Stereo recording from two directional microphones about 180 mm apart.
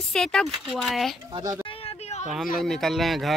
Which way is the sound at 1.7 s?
35° left (ahead or behind).